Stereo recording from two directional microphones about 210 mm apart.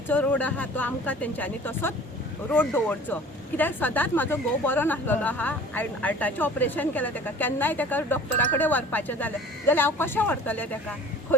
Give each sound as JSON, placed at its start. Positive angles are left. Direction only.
{"t": 0.1, "sound": "a woman's voice", "side_deg": 5}